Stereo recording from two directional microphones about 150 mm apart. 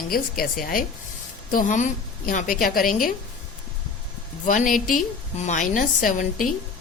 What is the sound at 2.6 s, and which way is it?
Speech, 70° left (ahead or behind).